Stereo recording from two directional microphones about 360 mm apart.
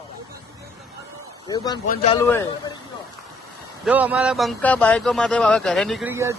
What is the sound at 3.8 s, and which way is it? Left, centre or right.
A man's voice, centre.